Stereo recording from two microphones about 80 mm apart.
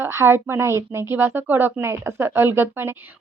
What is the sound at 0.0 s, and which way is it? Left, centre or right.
A woman's voice, right.